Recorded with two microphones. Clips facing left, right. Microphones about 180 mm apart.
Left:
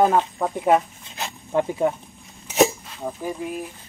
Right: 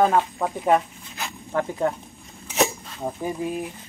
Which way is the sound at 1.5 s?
20° left (ahead or behind).